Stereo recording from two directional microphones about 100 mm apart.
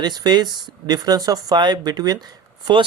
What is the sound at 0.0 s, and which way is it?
Speech, 45° right (ahead or behind).